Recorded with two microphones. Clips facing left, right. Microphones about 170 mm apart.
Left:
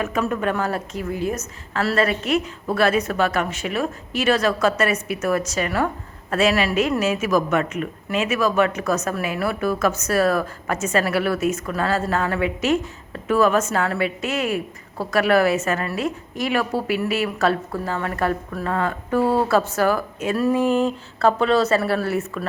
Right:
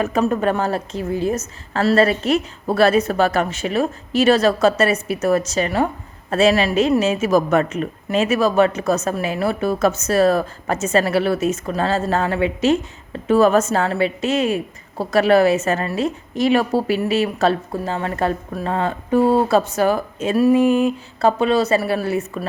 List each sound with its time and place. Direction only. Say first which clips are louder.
0.0 s a woman's voice: right 4 dB; 35° right (ahead or behind); by 22.4 s 15° right (ahead or behind)